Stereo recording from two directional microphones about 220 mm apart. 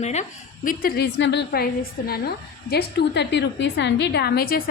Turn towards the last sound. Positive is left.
turn(degrees=40)  # may be behind; listen again after turning